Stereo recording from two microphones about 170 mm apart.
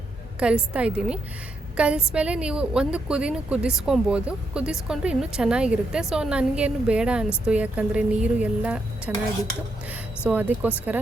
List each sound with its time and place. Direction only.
0.3 s a woman's voice: 5° right (ahead or behind)